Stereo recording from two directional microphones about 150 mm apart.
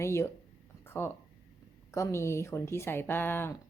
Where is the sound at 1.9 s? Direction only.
20° left (ahead or behind).